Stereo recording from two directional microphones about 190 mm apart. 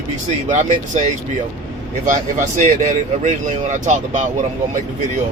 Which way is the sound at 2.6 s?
40° right (ahead or behind).